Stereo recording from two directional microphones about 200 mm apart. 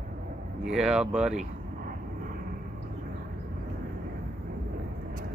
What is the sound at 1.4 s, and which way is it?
Vehicle, 45° right (ahead or behind).